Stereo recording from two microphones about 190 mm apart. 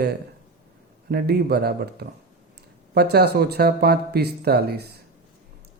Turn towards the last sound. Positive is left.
turn(degrees=-55)  # may be behind; listen again after turning